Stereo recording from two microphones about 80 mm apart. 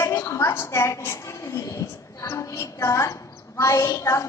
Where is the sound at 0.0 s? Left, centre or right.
Left.